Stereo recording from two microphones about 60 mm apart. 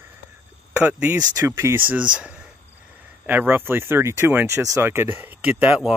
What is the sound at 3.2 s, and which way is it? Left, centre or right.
Speech, right.